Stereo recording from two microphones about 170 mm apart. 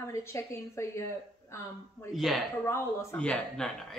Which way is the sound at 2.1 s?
Centre (ahead or behind).